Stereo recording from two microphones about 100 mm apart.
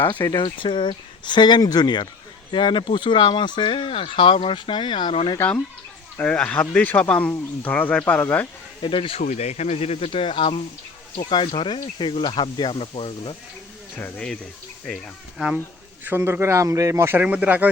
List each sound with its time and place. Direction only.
0.3 s speech: 55° left (ahead or behind)
5.4 s speech: 20° left (ahead or behind)
8.8 s speech: 60° left (ahead or behind)
12.7 s speech: 65° left (ahead or behind)
16.0 s speech: 25° right (ahead or behind)
17.2 s speech: 15° right (ahead or behind)